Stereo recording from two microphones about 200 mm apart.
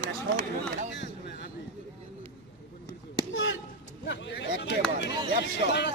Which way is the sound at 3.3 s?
65° left (ahead or behind).